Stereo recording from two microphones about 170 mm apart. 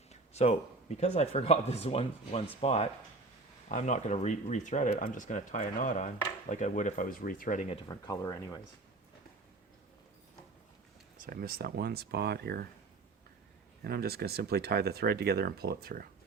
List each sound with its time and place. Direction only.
0.1 s speech: 40° left (ahead or behind); by 7.6 s 55° left (ahead or behind)
7.7 s speech: 25° left (ahead or behind)
11.2 s speech: 60° right (ahead or behind)
13.8 s speech: 65° right (ahead or behind)